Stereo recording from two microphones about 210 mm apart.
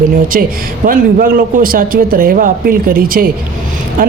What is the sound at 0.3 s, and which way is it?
Speech, 45° right (ahead or behind).